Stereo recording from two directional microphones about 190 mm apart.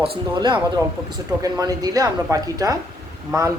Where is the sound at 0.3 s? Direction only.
25° right (ahead or behind).